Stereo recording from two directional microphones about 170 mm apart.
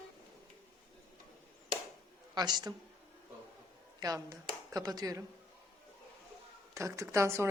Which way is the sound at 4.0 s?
20° right (ahead or behind).